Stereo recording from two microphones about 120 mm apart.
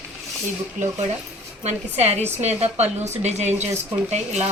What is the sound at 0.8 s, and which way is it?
Speech, 90° right.